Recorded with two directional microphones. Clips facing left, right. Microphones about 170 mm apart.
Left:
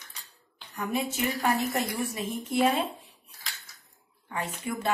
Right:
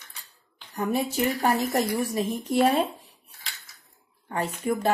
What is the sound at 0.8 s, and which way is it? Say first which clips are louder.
Speech: right 4 dB; 35° right (ahead or behind).